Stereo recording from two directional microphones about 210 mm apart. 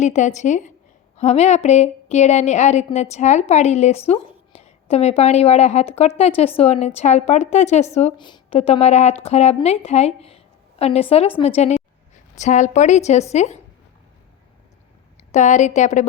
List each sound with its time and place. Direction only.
0.0 s a woman's voice: 35° left (ahead or behind)
15.3 s speech: 35° left (ahead or behind)